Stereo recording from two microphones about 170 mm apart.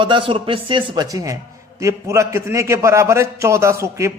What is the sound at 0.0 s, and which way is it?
A man's voice, 30° right (ahead or behind).